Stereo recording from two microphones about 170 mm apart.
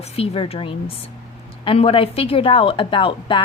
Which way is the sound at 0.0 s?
35° left (ahead or behind).